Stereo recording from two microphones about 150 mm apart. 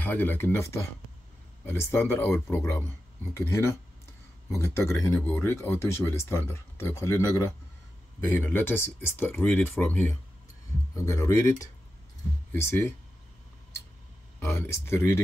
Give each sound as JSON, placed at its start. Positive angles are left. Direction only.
{"t": 0.0, "sound": "speech", "side_deg": 15}
{"t": 1.7, "sound": "speech", "side_deg": 15}
{"t": 12.5, "sound": "speech", "side_deg": 15}
{"t": 14.4, "sound": "speech", "side_deg": 15}